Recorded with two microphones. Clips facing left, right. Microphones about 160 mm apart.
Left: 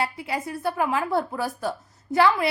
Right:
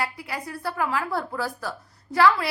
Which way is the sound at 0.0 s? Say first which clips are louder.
Left 3 dB; 25° left (ahead or behind).